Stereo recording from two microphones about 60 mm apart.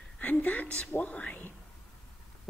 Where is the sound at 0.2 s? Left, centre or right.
Left.